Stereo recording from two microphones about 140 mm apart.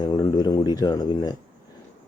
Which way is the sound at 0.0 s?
30° left (ahead or behind).